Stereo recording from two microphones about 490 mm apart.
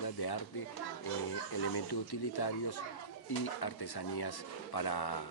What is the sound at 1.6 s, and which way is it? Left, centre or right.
Speech, left.